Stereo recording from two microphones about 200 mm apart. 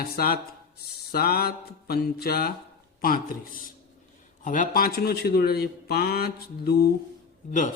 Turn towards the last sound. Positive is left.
turn(degrees=40)  # may be behind; listen again after turning